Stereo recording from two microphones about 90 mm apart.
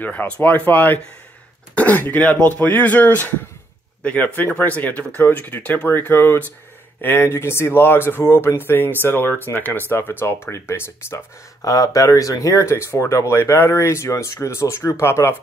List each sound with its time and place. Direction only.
0.0 s speech: 20° left (ahead or behind)
11.6 s speech: 40° left (ahead or behind)